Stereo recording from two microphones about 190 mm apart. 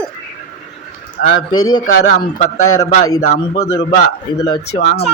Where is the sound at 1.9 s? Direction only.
50° left (ahead or behind).